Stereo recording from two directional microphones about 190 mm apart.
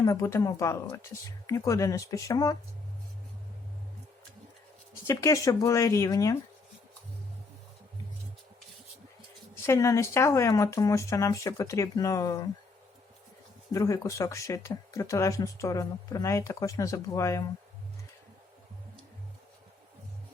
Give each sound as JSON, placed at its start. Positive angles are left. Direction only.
{"t": 0.0, "sound": "speech", "side_deg": 15}
{"t": 5.0, "sound": "speech", "side_deg": 15}
{"t": 9.6, "sound": "speech", "side_deg": 15}
{"t": 13.7, "sound": "speech", "side_deg": 15}